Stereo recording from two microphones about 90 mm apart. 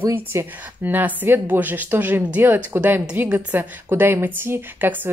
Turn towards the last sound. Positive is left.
turn(degrees=-25)  # may be behind; listen again after turning